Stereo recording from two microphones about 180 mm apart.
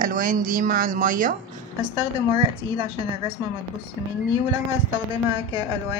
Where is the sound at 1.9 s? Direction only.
25° right (ahead or behind).